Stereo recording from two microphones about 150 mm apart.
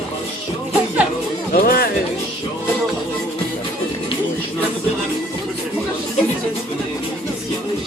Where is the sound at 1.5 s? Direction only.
85° left.